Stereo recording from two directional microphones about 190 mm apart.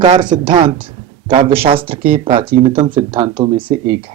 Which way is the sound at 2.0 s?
50° right (ahead or behind).